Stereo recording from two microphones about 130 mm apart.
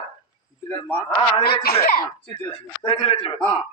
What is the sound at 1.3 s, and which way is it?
Speech, 35° left (ahead or behind).